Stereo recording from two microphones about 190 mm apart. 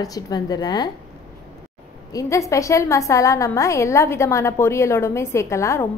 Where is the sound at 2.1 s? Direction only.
15° left (ahead or behind).